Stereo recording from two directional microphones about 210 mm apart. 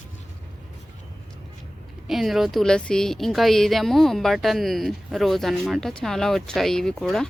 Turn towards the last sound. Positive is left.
turn(degrees=0)  # may be behind; listen again after turning